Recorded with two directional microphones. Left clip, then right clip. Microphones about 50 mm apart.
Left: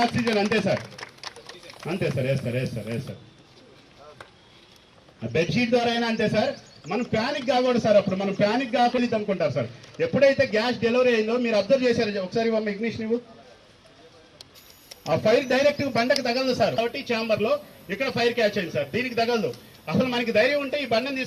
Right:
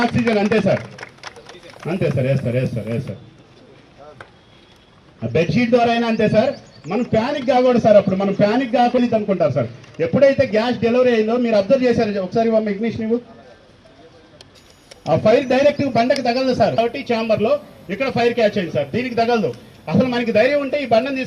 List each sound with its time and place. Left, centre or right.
0.1 s a man's voice: left
0.9 s a sound: right
1.8 s a man's voice: left
5.2 s a man's voice: left
15.0 s a man's voice: left